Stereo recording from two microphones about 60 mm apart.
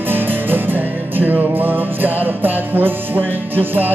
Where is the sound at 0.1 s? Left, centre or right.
Right.